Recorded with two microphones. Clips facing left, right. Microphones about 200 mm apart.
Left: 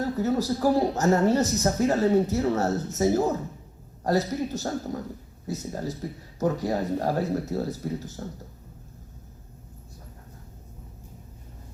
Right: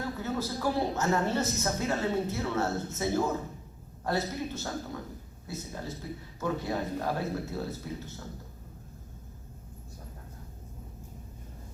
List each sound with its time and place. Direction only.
0.0 s a woman's voice: 40° left (ahead or behind)